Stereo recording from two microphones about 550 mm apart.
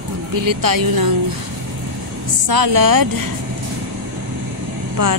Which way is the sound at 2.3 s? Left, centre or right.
Right.